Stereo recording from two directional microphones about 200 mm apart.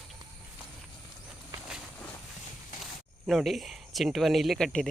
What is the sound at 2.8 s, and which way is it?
Speech, centre (ahead or behind).